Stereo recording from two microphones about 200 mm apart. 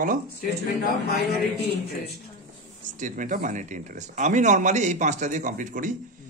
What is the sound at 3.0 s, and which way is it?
Speech, 40° right (ahead or behind).